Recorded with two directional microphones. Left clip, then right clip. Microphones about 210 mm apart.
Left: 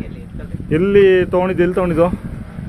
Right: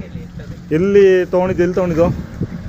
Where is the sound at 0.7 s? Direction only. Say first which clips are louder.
Right 1 dB; 5° left (ahead or behind).